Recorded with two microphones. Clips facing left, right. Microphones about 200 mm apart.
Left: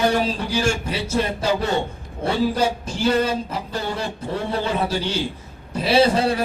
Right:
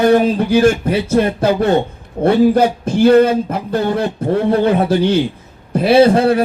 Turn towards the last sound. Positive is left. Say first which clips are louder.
# right 7 dB
turn(degrees=-55)  # may be behind; listen again after turning